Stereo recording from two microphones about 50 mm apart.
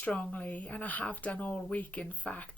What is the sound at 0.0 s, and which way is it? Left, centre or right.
Speech, left.